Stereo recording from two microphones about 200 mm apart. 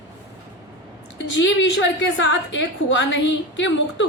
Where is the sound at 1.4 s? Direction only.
65° left (ahead or behind).